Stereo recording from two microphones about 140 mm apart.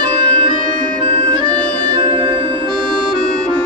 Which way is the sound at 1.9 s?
35° right (ahead or behind).